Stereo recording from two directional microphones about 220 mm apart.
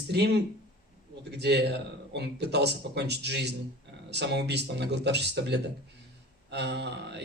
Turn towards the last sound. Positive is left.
turn(degrees=-50)  # may be behind; listen again after turning